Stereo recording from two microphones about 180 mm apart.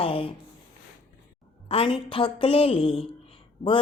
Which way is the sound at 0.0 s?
30° left (ahead or behind).